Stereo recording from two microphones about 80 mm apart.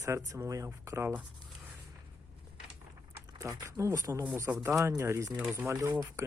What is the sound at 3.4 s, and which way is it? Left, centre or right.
Speech, right.